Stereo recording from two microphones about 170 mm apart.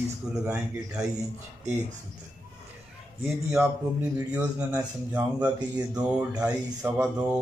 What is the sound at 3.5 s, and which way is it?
A man's voice, 15° right (ahead or behind).